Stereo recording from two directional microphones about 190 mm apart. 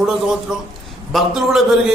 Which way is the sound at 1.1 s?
Centre (ahead or behind).